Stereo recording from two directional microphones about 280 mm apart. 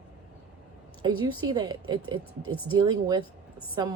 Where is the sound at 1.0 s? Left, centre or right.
Centre.